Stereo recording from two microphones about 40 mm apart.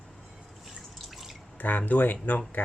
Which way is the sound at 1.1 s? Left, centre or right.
Centre.